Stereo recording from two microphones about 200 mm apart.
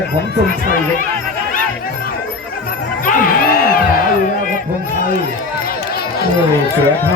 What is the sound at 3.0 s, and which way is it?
Music, 45° left (ahead or behind).